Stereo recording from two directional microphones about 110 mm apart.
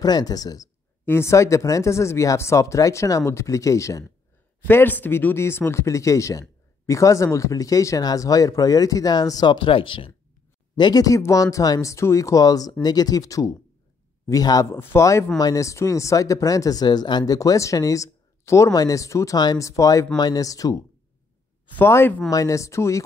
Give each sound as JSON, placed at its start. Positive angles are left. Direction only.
{"t": 0.0, "sound": "speech", "side_deg": 35}
{"t": 1.0, "sound": "speech", "side_deg": 25}
{"t": 4.6, "sound": "speech", "side_deg": 15}
{"t": 10.8, "sound": "speech", "side_deg": 35}
{"t": 14.7, "sound": "speech", "side_deg": 20}
{"t": 21.7, "sound": "speech", "side_deg": 20}